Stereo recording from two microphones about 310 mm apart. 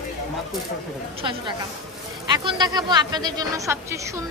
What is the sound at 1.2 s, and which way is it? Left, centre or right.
A woman's voice, centre.